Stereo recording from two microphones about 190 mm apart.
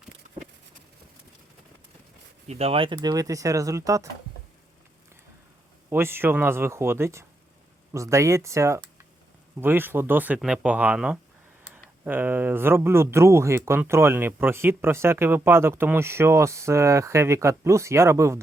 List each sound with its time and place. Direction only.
2.5 s speech: 30° right (ahead or behind); by 4.1 s 15° right (ahead or behind)
5.9 s speech: 10° right (ahead or behind)